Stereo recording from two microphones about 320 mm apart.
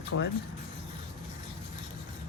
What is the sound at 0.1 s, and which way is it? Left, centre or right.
Speech, left.